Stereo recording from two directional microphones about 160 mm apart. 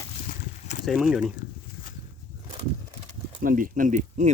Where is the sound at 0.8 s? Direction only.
5° right (ahead or behind).